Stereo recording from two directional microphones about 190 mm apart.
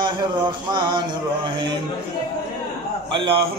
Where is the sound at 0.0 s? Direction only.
25° right (ahead or behind).